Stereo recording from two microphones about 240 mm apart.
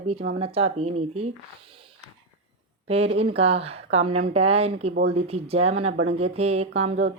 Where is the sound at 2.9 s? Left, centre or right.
Right.